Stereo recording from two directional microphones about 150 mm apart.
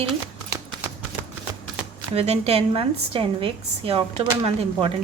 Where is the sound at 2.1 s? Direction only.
40° right (ahead or behind).